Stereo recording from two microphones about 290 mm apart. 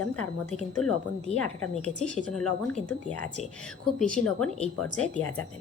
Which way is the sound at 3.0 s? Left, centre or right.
Left.